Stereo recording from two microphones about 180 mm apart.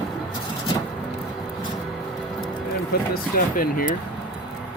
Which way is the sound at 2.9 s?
60° left (ahead or behind).